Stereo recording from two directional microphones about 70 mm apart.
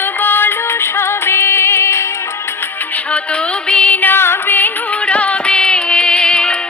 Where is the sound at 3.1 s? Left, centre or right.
Centre.